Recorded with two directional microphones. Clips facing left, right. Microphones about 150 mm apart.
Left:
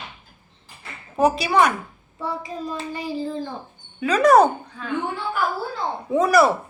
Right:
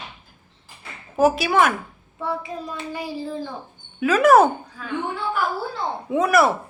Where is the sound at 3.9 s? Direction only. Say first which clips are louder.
Even; 5° right (ahead or behind).